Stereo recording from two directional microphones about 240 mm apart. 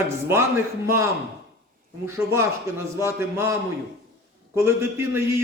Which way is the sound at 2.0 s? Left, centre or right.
Centre.